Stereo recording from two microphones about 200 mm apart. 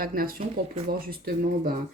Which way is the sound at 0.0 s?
45° right (ahead or behind).